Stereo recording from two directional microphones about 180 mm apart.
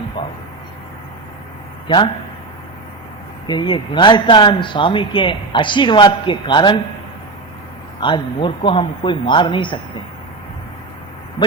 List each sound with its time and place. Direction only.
3.4 s a man's voice: 25° left (ahead or behind)
8.0 s a man's voice: 25° left (ahead or behind)